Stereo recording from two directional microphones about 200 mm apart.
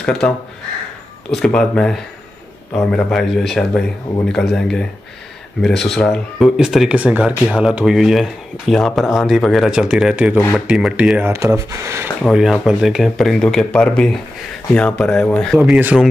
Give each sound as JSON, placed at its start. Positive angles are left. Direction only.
{"t": 0.0, "sound": "speech", "side_deg": 0}
{"t": 1.3, "sound": "speech", "side_deg": 5}
{"t": 12.2, "sound": "speech", "side_deg": 0}